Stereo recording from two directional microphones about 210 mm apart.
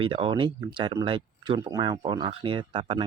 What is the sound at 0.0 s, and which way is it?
Speech, 25° right (ahead or behind).